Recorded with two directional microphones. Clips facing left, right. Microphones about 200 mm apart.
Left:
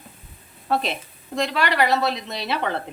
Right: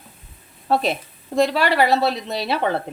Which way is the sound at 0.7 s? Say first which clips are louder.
Right 4 dB; 35° right (ahead or behind).